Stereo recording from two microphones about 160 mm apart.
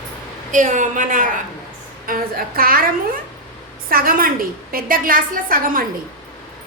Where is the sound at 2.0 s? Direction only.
65° right (ahead or behind).